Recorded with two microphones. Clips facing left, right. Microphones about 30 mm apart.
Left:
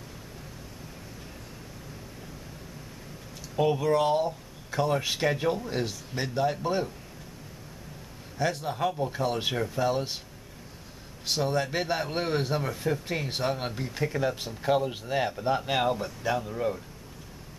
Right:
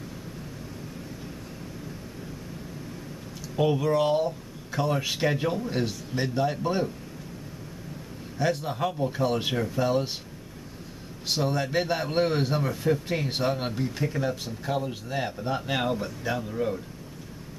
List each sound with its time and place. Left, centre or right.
3.5 s speech: centre
8.4 s speech: centre
11.2 s speech: centre